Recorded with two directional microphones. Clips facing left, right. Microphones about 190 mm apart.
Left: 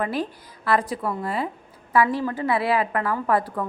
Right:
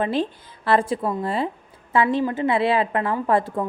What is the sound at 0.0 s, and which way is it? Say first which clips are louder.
A woman's voice: right 3 dB; 25° right (ahead or behind).